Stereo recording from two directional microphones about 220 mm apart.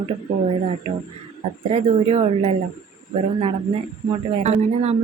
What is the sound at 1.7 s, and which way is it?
Speech, 25° right (ahead or behind).